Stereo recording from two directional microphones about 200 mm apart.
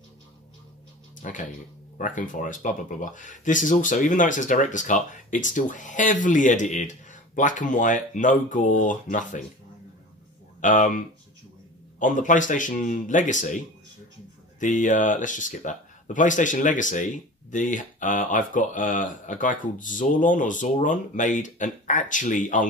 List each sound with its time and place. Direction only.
1.2 s speech: 40° left (ahead or behind)
10.6 s speech: 40° left (ahead or behind)
12.0 s speech: 40° left (ahead or behind)
14.6 s speech: 40° left (ahead or behind)